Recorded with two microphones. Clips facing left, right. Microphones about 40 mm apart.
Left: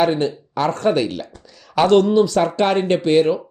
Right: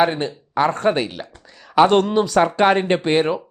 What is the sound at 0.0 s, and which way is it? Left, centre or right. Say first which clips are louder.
Speech: left 1 dB; centre.